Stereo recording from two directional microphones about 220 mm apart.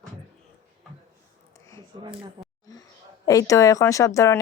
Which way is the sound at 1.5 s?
15° left (ahead or behind).